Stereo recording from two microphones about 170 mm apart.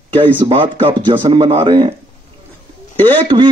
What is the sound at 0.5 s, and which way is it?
Speech, 30° right (ahead or behind).